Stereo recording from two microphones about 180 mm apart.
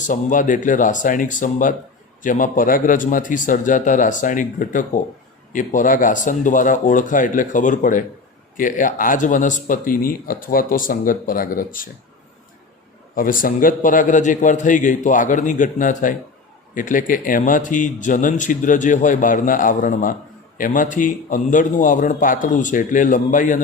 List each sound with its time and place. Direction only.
0.0 s speech: 45° left (ahead or behind)
13.1 s speech: 50° left (ahead or behind)